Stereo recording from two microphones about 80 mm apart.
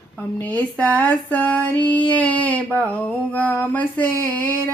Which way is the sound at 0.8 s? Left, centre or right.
Left.